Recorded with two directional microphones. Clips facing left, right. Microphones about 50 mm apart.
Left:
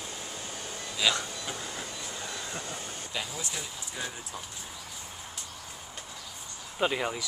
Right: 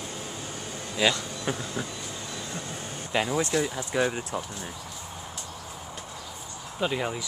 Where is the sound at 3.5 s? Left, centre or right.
Right.